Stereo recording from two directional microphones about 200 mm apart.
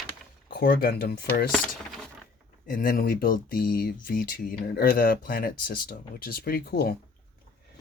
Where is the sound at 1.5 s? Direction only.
Centre (ahead or behind).